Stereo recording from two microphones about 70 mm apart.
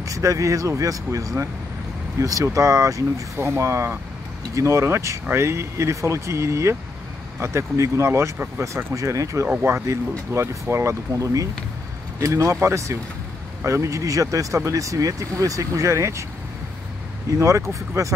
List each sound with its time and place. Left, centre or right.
0.0 s speech: right
8.9 s speech: right
9.6 s speech: right
17.3 s speech: right